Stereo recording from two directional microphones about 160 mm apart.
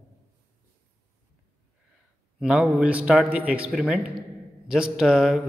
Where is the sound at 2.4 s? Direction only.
5° right (ahead or behind).